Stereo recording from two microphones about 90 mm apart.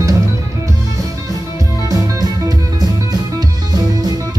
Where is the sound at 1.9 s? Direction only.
45° right (ahead or behind).